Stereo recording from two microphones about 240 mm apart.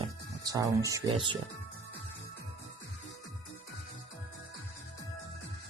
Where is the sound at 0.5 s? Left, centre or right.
Centre.